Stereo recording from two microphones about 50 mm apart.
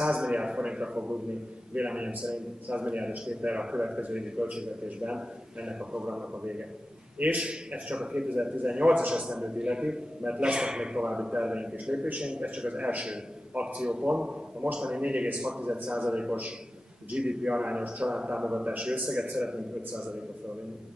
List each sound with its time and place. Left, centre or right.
0.0 s a man's voice: centre